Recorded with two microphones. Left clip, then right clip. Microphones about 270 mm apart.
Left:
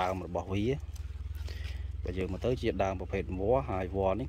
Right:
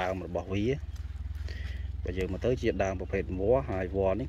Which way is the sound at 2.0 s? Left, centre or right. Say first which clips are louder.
Right 3 dB; centre.